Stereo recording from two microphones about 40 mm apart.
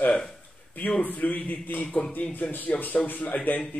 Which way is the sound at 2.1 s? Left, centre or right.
Left.